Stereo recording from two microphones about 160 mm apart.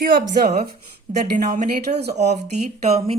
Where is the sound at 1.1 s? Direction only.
50° right (ahead or behind).